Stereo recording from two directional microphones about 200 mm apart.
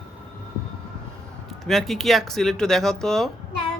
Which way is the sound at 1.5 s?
Centre (ahead or behind).